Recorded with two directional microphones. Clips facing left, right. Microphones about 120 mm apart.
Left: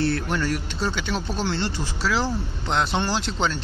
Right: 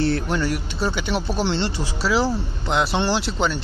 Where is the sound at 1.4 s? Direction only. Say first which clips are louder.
Right 3 dB; 25° right (ahead or behind).